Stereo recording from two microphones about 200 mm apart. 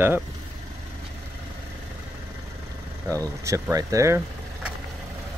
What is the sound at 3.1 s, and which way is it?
Speech, 15° right (ahead or behind).